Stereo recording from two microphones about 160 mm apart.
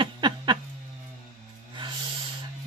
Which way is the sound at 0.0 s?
30° right (ahead or behind).